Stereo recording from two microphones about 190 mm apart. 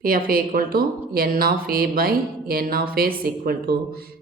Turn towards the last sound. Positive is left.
turn(degrees=-55)  # may be behind; listen again after turning